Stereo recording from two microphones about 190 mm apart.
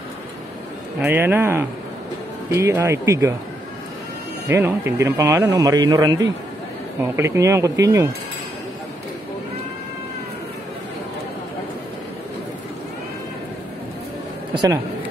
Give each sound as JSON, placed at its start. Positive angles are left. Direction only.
{"t": 1.0, "sound": "speech", "side_deg": -10}
{"t": 4.5, "sound": "a man's voice", "side_deg": -10}
{"t": 14.5, "sound": "a sound", "side_deg": -25}